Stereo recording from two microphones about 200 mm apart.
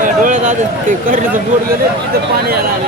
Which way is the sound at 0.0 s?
40° right (ahead or behind).